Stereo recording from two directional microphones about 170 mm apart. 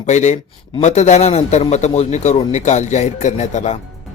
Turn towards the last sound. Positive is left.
turn(degrees=45)  # may be behind; listen again after turning